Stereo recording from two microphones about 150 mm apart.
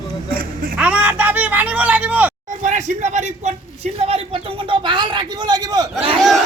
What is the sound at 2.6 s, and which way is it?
A man's voice, 55° right (ahead or behind).